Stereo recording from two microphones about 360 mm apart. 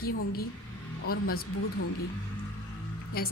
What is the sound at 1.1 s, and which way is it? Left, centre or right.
Speech, left.